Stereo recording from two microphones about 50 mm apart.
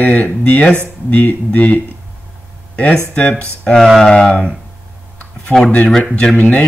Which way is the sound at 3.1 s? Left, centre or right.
Left.